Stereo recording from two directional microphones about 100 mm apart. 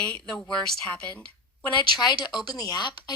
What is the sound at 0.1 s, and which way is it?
Speech, 10° left (ahead or behind).